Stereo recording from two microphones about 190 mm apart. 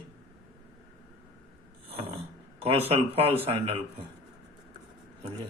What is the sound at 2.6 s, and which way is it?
Speech, 30° right (ahead or behind).